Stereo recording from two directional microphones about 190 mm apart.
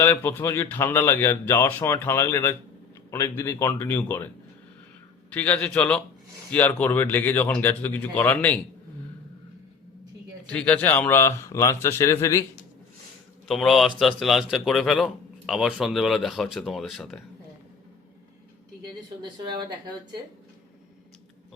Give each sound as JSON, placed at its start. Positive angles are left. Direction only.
{"t": 0.0, "sound": "speech", "side_deg": 10}
{"t": 5.3, "sound": "speech", "side_deg": 10}
{"t": 10.4, "sound": "speech", "side_deg": 5}
{"t": 13.5, "sound": "speech", "side_deg": 0}